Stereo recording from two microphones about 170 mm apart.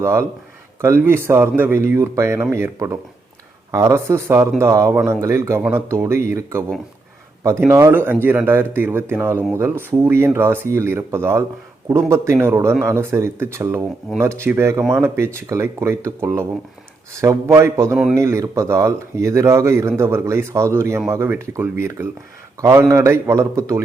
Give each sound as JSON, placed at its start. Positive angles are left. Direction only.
{"t": 0.0, "sound": "speech", "side_deg": -15}
{"t": 17.9, "sound": "speech", "side_deg": 0}
{"t": 18.2, "sound": "speech", "side_deg": -15}